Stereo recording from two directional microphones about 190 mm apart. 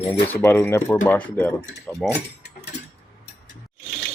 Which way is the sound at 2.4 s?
60° left (ahead or behind).